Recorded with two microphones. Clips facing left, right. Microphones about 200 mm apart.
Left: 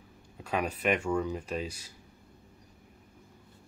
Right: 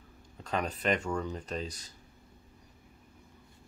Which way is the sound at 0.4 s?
10° left (ahead or behind).